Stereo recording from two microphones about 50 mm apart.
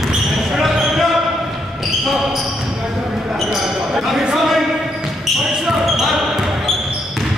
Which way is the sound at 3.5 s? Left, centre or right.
Centre.